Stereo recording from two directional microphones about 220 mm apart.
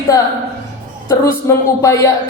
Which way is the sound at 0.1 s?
15° left (ahead or behind).